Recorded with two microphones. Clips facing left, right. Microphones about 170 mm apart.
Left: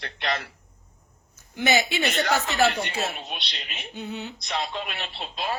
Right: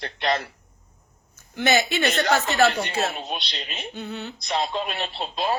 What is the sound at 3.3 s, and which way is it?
Speech, 35° right (ahead or behind).